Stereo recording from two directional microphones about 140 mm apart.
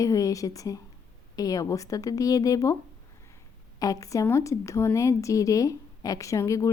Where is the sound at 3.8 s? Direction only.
25° left (ahead or behind).